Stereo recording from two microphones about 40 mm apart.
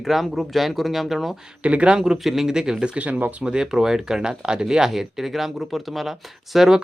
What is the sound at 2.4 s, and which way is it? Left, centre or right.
Speech, centre.